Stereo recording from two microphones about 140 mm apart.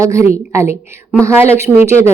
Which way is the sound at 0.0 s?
20° right (ahead or behind).